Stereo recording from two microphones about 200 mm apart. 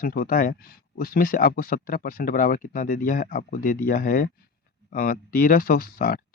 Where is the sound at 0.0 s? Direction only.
45° left (ahead or behind).